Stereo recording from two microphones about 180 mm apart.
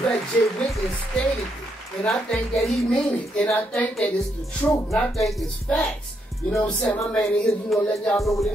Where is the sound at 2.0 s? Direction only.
Centre (ahead or behind).